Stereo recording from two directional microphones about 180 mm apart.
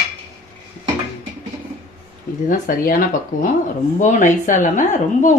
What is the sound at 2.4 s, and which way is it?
A woman's voice, 50° left (ahead or behind).